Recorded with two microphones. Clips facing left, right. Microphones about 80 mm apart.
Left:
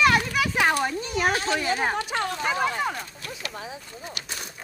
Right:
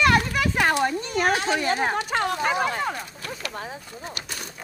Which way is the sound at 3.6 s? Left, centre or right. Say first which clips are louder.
Right 2 dB; right.